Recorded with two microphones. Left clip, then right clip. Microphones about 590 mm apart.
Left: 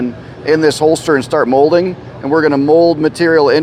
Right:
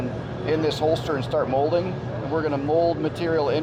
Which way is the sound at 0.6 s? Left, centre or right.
Left.